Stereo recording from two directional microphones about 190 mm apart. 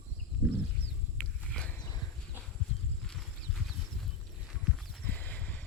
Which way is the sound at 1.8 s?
20° left (ahead or behind).